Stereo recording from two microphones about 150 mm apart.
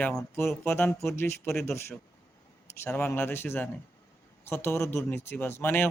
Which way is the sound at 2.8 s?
15° left (ahead or behind).